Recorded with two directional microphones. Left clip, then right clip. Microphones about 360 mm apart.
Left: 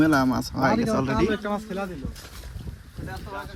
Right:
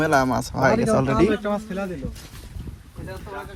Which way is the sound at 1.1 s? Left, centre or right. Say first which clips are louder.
Right 4 dB; left.